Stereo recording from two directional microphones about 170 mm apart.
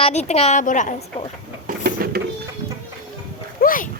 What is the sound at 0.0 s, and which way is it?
A woman's voice, 40° left (ahead or behind).